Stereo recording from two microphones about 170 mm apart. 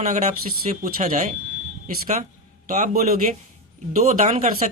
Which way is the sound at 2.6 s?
50° right (ahead or behind).